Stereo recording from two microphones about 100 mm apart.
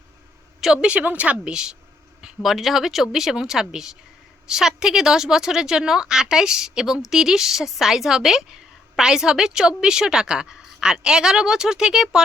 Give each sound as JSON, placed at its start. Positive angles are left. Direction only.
{"t": 0.6, "sound": "a woman's voice", "side_deg": -5}